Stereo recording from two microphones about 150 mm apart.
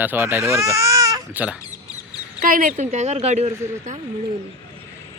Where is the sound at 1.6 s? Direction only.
25° left (ahead or behind).